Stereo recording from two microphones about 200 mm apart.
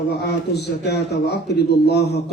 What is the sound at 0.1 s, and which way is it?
Speech, 55° left (ahead or behind).